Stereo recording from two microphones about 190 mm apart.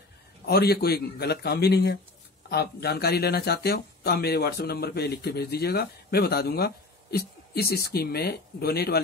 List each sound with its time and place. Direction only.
0.5 s speech: 55° left (ahead or behind)